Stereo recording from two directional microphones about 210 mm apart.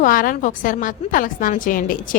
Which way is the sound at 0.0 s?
40° left (ahead or behind).